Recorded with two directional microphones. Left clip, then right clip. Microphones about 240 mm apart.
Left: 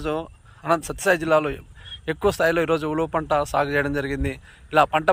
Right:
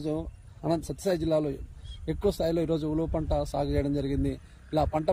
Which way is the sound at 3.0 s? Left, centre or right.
Left.